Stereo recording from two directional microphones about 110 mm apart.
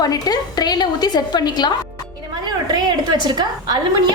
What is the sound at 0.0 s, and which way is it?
A woman's voice, 35° left (ahead or behind).